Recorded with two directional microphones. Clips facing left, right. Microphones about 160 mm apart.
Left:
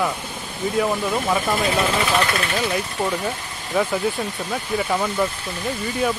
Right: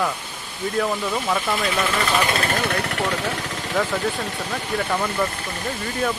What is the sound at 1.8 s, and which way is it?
Speech, 25° left (ahead or behind).